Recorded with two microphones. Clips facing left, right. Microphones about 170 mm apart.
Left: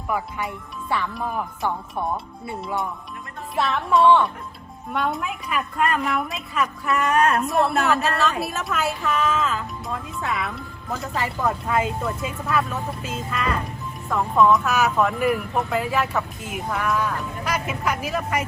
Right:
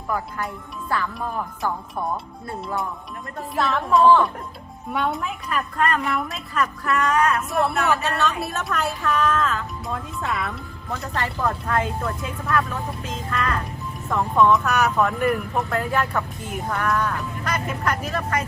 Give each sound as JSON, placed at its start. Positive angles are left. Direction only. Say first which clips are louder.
{"t": 0.1, "sound": "speech", "louder": "even", "side_deg": 0}
{"t": 6.9, "sound": "speech", "louder": "left 1 dB", "side_deg": 15}
{"t": 7.4, "sound": "speech", "louder": "left 1 dB", "side_deg": 0}